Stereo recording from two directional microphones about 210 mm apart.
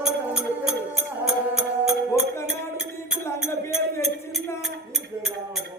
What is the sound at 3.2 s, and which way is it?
Music, 10° left (ahead or behind).